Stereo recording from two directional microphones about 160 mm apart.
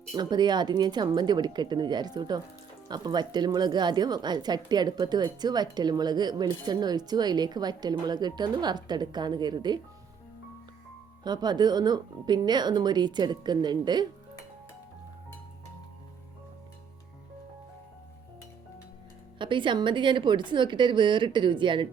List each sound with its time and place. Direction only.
0.1 s a woman's voice: 25° right (ahead or behind)
11.2 s a woman's voice: 25° right (ahead or behind)
19.4 s a woman's voice: 30° right (ahead or behind)